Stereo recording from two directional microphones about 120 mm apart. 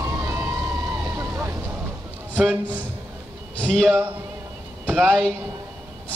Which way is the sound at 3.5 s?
5° left (ahead or behind).